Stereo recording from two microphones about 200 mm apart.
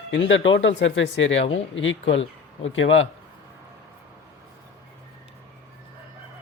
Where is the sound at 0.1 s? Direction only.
70° left (ahead or behind).